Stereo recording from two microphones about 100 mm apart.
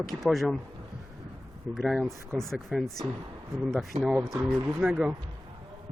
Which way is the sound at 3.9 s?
90° right.